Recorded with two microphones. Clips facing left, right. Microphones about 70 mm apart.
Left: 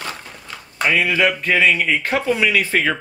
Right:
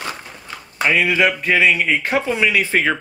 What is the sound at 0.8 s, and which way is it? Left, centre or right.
A man's voice, centre.